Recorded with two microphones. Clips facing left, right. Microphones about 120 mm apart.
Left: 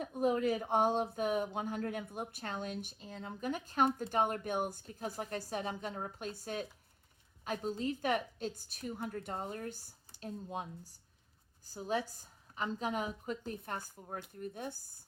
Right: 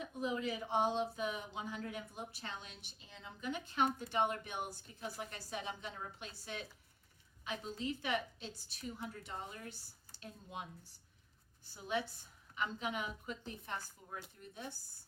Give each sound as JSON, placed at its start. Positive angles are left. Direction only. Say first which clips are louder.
{"t": 0.0, "sound": "a woman's voice", "louder": "left 7 dB", "side_deg": 50}